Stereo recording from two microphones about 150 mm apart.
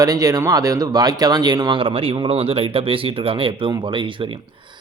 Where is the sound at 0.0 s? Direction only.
25° right (ahead or behind).